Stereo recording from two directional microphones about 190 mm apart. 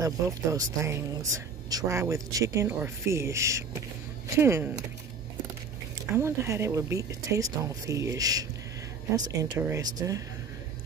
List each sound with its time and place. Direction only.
0.0 s speech: 20° right (ahead or behind)
6.1 s speech: 15° right (ahead or behind)